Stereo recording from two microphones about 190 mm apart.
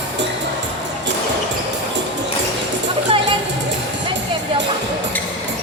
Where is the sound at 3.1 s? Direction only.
30° right (ahead or behind).